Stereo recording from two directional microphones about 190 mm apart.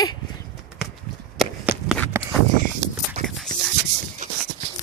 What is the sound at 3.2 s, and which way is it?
Dog, centre (ahead or behind).